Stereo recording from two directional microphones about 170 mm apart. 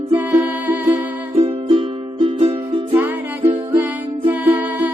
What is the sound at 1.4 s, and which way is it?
Music, 35° right (ahead or behind).